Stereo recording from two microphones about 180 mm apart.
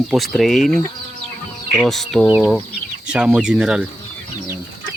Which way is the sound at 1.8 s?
Centre (ahead or behind).